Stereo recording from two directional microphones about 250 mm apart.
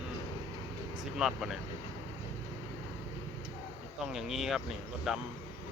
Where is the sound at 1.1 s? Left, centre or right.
Centre.